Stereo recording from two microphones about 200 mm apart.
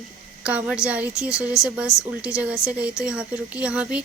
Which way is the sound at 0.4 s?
5° right (ahead or behind).